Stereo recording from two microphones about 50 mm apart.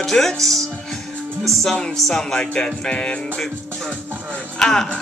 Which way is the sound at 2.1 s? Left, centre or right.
Centre.